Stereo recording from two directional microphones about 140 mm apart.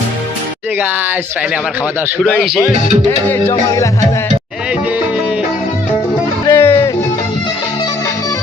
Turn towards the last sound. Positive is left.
turn(degrees=15)  # may be behind; listen again after turning